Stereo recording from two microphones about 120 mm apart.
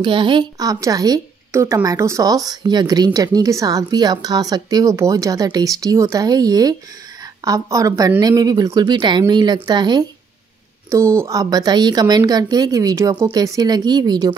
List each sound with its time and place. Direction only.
0.0 s a woman's voice: 40° right (ahead or behind)
10.9 s a woman's voice: 25° right (ahead or behind)